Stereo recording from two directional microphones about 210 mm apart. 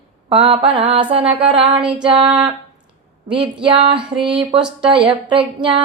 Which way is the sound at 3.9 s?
25° right (ahead or behind).